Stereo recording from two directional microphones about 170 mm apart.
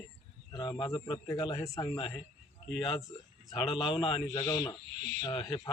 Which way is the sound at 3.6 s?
30° left (ahead or behind).